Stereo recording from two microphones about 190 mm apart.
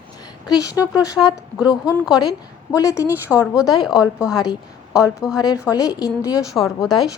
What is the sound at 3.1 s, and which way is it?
A woman's voice, 10° right (ahead or behind).